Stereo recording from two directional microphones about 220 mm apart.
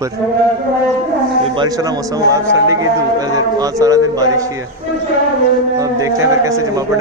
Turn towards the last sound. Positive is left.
turn(degrees=-15)  # may be behind; listen again after turning